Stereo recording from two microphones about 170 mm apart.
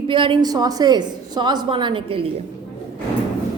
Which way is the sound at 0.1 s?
30° right (ahead or behind).